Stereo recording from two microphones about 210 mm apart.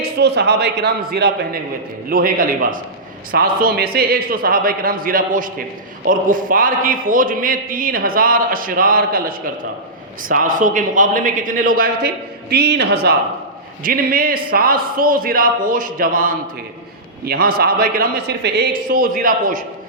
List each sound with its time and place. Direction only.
0.2 s a man's voice: 50° right (ahead or behind)
10.2 s a man's voice: 40° right (ahead or behind)